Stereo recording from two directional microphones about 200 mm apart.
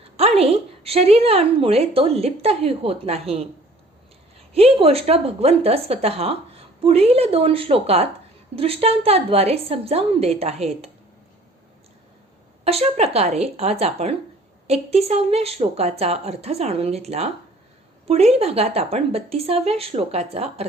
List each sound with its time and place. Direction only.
0.2 s a woman's voice: 30° right (ahead or behind)
4.5 s a woman's voice: 30° right (ahead or behind)
12.6 s a woman's voice: 30° right (ahead or behind)